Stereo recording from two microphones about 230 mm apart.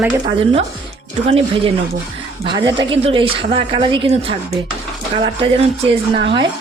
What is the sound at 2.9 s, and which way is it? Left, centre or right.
A woman's voice, right.